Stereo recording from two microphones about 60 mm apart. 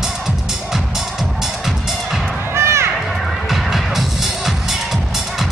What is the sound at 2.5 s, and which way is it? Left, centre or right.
Run, right.